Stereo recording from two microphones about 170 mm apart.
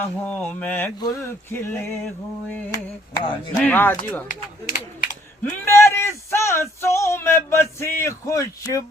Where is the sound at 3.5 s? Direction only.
10° left (ahead or behind).